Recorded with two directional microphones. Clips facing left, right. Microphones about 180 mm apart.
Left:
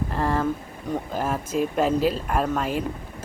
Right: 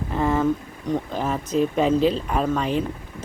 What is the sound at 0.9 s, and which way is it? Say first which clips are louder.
Speech: right 2 dB; 5° left (ahead or behind).